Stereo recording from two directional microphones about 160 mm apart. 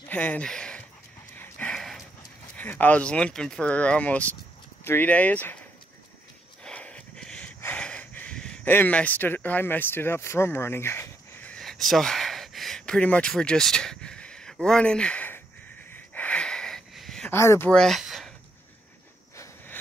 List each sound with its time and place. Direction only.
0.1 s speech: 10° left (ahead or behind)
1.4 s dog: 10° left (ahead or behind)
2.5 s speech: 10° left (ahead or behind)
6.6 s a sound: 5° left (ahead or behind)
17.3 s speech: 15° left (ahead or behind)
17.6 s speech: 5° left (ahead or behind)
19.3 s cricket: 20° left (ahead or behind)